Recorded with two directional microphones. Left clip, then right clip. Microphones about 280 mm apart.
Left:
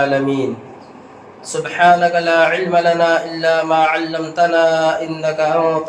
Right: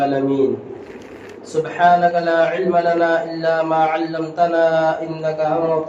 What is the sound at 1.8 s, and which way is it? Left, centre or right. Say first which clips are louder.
Speech: left 2 dB; left.